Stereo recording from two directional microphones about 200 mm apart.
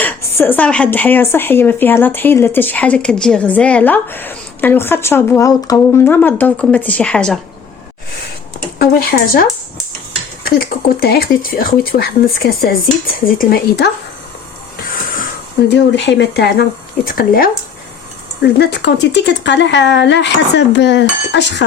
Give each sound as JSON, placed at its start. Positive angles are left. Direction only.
{"t": 0.3, "sound": "speech", "side_deg": 10}
{"t": 8.8, "sound": "speech", "side_deg": 50}
{"t": 15.7, "sound": "speech", "side_deg": 60}